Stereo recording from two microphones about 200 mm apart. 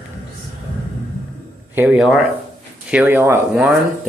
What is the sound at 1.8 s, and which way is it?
Speech, 5° right (ahead or behind).